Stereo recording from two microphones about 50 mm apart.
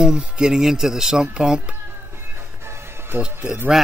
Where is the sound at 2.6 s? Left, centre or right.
Right.